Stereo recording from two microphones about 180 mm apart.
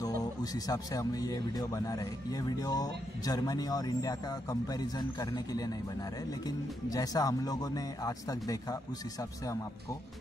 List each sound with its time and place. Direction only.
0.0 s speech: 20° left (ahead or behind)